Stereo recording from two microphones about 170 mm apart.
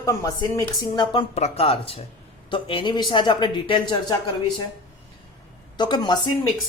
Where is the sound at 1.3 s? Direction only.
35° left (ahead or behind).